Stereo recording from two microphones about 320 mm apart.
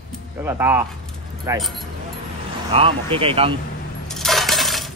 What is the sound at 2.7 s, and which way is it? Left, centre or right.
Speech, centre.